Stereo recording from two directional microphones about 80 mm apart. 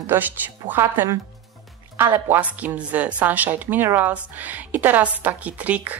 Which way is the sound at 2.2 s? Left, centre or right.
Right.